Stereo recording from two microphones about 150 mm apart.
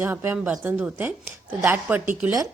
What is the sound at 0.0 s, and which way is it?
A woman's voice, 15° right (ahead or behind).